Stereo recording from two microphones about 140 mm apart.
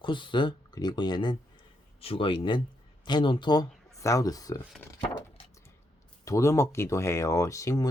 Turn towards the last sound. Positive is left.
turn(degrees=25)  # may be behind; listen again after turning